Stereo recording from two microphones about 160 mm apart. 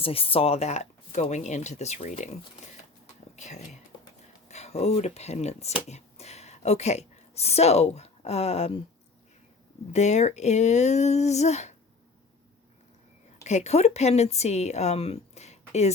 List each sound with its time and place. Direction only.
0.0 s speech: 35° left (ahead or behind)
3.3 s speech: 45° left (ahead or behind)
9.9 s speech: 45° left (ahead or behind)
13.4 s a woman's voice: 45° left (ahead or behind)